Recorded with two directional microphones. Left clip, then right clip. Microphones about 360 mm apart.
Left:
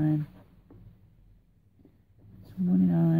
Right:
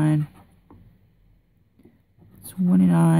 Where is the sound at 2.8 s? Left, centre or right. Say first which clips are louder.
Right 7 dB; centre.